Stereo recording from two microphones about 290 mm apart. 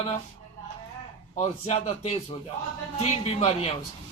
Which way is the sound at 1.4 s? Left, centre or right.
Left.